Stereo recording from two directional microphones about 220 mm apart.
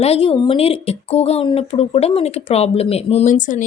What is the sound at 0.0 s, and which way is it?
Speech, 25° left (ahead or behind).